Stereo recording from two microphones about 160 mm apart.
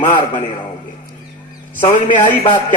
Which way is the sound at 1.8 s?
50° left (ahead or behind).